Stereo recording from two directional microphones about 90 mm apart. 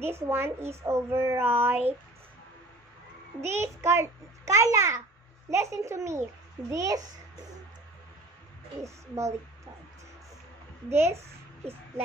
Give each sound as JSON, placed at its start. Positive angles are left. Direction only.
{"t": 0.0, "sound": "a child's voice", "side_deg": -25}
{"t": 3.3, "sound": "a child's voice", "side_deg": -30}
{"t": 8.8, "sound": "a child's voice", "side_deg": -35}
{"t": 10.9, "sound": "a child's voice", "side_deg": -30}